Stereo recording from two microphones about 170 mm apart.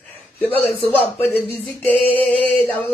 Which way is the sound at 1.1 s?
10° left (ahead or behind).